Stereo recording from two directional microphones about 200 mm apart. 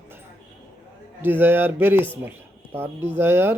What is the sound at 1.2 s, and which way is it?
Speech, 10° right (ahead or behind).